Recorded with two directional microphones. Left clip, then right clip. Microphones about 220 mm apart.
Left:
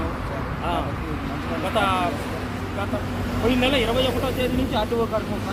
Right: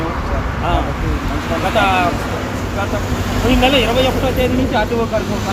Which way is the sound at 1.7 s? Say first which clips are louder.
Right 7 dB; 15° left (ahead or behind).